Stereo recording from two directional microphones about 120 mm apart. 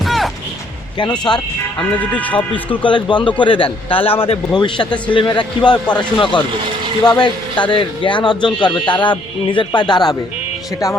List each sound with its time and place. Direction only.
0.0 s music: centre (ahead or behind)
1.3 s speech: 40° left (ahead or behind)
2.8 s a man's voice: 40° left (ahead or behind)